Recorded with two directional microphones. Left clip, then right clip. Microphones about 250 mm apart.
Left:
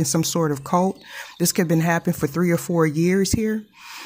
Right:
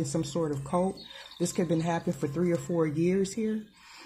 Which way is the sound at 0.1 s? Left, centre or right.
Left.